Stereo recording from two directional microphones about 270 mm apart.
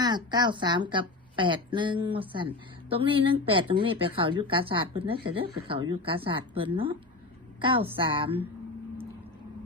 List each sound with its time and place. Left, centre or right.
0.0 s a woman's voice: centre